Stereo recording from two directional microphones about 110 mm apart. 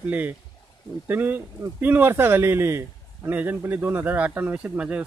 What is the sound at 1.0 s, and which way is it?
Speech, 15° right (ahead or behind).